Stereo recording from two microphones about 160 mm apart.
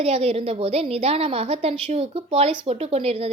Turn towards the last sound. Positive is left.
turn(degrees=-40)  # may be behind; listen again after turning